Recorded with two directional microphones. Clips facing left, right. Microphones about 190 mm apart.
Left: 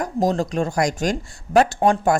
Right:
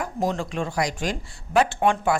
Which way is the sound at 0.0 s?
40° left (ahead or behind).